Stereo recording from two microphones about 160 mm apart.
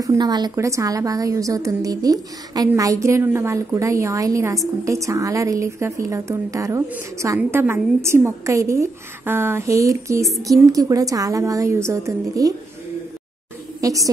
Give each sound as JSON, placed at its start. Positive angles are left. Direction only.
{"t": 0.0, "sound": "a woman's voice", "side_deg": -25}
{"t": 13.7, "sound": "a woman's voice", "side_deg": -20}